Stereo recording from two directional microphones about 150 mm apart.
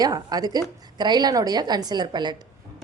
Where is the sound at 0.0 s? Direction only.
25° right (ahead or behind).